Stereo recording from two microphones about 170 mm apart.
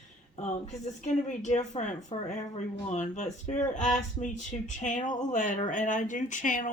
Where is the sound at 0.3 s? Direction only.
45° left (ahead or behind).